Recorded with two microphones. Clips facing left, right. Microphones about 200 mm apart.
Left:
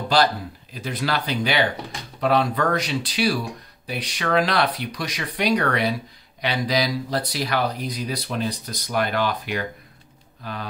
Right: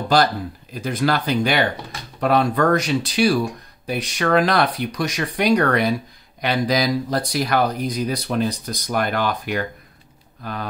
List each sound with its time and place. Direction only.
0.7 s speech: 45° right (ahead or behind)